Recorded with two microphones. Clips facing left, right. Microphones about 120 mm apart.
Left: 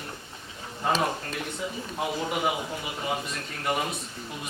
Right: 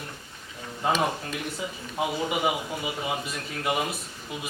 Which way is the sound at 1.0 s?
5° right (ahead or behind).